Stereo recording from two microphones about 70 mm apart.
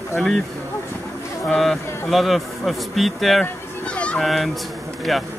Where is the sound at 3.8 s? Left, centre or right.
Centre.